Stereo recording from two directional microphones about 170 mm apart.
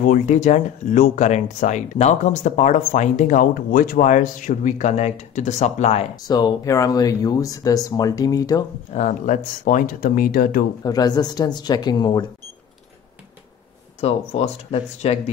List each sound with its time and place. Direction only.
0.0 s speech: 45° left (ahead or behind)
6.2 s speech: 25° left (ahead or behind)
8.9 s speech: 45° left (ahead or behind)
10.8 s speech: 20° left (ahead or behind)
14.0 s speech: 35° left (ahead or behind)